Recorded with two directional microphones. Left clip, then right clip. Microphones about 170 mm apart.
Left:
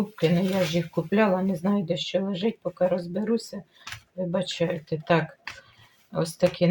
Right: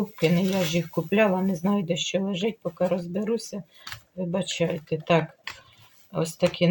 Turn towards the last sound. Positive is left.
turn(degrees=-15)  # may be behind; listen again after turning